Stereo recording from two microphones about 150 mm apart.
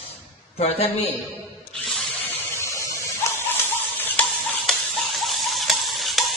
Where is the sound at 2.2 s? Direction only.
15° left (ahead or behind); by 6.3 s centre (ahead or behind).